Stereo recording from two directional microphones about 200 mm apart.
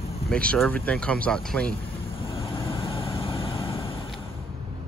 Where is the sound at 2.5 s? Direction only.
25° left (ahead or behind).